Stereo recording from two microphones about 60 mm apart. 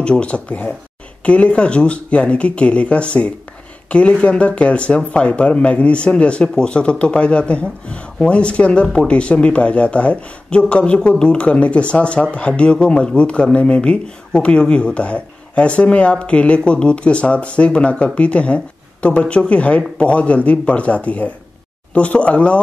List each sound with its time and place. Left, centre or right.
0.0 s speech: centre